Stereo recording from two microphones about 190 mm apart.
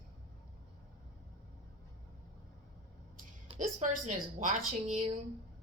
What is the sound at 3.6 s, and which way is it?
Speech, 40° right (ahead or behind).